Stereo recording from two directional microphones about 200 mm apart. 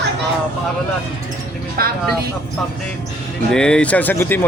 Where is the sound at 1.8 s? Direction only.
50° right (ahead or behind).